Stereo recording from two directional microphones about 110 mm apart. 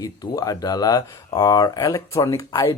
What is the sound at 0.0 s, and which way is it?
Speech, 35° left (ahead or behind).